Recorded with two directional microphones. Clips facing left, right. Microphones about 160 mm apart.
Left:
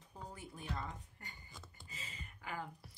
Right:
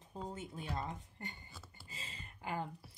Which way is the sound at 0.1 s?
25° right (ahead or behind).